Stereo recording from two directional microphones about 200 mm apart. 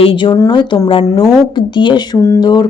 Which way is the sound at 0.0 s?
25° left (ahead or behind).